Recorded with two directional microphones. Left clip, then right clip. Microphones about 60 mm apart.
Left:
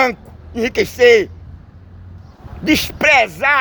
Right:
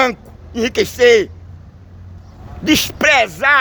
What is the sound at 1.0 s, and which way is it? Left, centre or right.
Speech, right.